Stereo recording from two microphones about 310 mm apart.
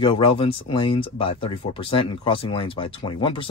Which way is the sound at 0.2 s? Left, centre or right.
Centre.